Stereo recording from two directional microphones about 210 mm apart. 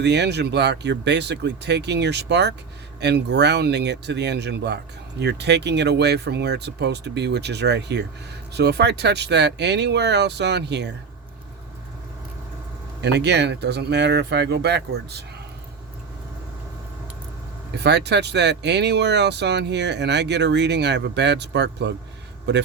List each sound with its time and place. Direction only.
0.0 s speech: 55° right (ahead or behind)
13.0 s speech: 55° right (ahead or behind)
17.7 s speech: 55° right (ahead or behind)